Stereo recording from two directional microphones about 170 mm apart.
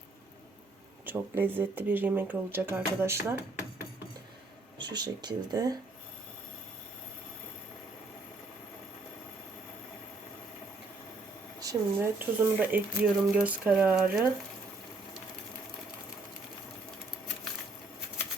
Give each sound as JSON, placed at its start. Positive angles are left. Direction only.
{"t": 1.0, "sound": "speech", "side_deg": -10}
{"t": 4.8, "sound": "speech", "side_deg": -25}
{"t": 11.6, "sound": "speech", "side_deg": -15}